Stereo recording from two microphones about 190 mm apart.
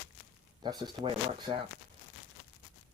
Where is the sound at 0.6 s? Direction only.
20° right (ahead or behind).